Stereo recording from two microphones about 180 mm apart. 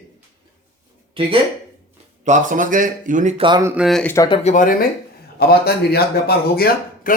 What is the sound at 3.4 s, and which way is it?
Speech, 25° right (ahead or behind).